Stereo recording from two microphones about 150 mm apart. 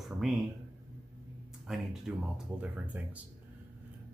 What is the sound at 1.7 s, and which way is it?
Speech, 5° right (ahead or behind).